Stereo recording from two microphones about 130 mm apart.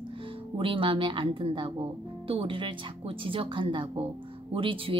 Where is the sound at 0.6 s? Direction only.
40° right (ahead or behind).